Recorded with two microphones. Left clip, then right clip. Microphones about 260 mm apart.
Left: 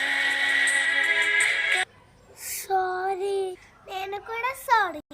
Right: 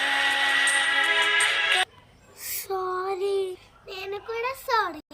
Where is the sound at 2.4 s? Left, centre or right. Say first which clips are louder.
Left 4 dB; centre.